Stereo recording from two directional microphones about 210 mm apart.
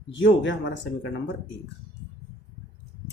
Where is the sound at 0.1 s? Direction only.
60° left (ahead or behind).